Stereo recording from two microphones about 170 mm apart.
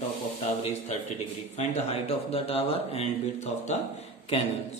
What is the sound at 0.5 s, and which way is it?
Speech, 40° left (ahead or behind).